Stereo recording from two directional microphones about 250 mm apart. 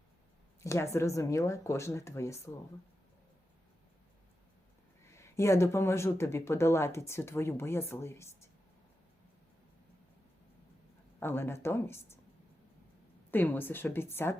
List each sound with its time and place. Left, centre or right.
0.6 s speech: centre
5.0 s speech: centre
11.2 s speech: centre
13.3 s speech: centre